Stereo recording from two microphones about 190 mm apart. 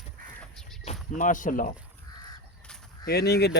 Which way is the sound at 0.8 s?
35° left (ahead or behind).